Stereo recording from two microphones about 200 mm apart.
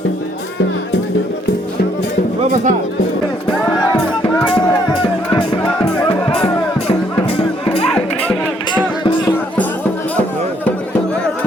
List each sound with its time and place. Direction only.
2.4 s speech: 40° right (ahead or behind)
5.4 s music: 25° left (ahead or behind)